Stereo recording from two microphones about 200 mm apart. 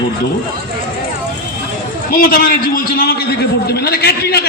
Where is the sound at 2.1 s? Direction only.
45° left (ahead or behind).